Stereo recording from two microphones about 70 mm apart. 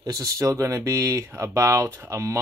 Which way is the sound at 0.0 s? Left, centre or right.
Right.